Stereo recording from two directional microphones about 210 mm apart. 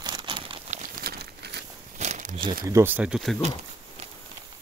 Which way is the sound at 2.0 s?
35° right (ahead or behind).